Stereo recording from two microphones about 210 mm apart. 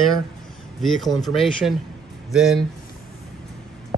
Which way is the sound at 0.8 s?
Centre (ahead or behind).